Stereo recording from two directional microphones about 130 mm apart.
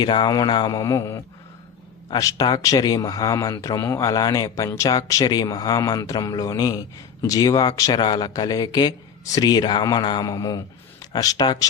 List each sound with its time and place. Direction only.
0.0 s speech: 35° left (ahead or behind)